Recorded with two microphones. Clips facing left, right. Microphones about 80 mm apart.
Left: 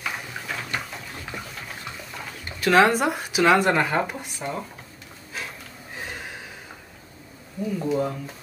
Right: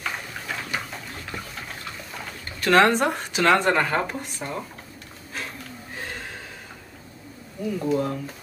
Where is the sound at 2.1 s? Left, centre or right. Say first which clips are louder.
Even; centre.